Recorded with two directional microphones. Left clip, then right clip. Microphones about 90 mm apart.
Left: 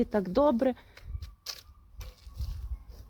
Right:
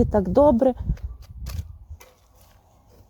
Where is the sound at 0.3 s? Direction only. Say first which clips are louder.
Right 9 dB; 60° right (ahead or behind).